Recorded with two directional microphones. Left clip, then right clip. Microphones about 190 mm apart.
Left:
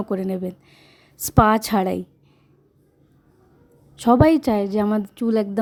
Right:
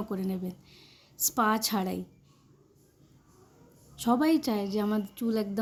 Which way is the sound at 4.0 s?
45° left (ahead or behind).